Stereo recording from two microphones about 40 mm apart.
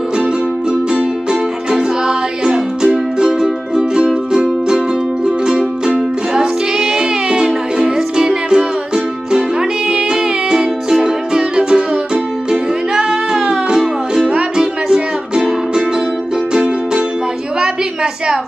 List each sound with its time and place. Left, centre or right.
1.7 s music: centre